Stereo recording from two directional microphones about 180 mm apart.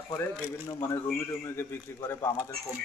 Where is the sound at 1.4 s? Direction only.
15° left (ahead or behind).